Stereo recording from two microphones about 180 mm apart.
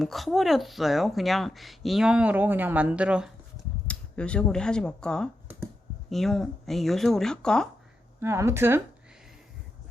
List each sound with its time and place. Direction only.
0.0 s speech: centre (ahead or behind)
3.8 s speech: 5° left (ahead or behind)
8.2 s speech: 15° right (ahead or behind)